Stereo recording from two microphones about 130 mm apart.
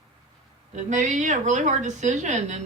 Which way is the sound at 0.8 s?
70° right (ahead or behind).